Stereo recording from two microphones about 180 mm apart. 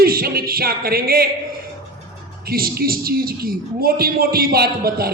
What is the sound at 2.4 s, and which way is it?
A man's voice, 55° right (ahead or behind).